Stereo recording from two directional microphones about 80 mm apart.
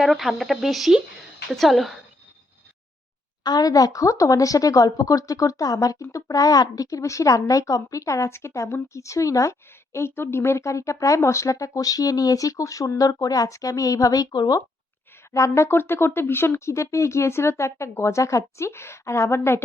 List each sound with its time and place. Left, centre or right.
0.0 s speech: centre
3.4 s speech: left
15.3 s speech: left